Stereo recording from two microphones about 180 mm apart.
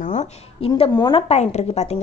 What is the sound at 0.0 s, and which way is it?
Speech, 40° left (ahead or behind).